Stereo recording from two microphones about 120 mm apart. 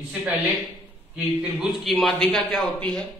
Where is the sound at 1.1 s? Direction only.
5° right (ahead or behind).